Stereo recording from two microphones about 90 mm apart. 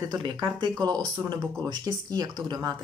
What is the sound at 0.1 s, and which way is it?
Speech, 55° right (ahead or behind).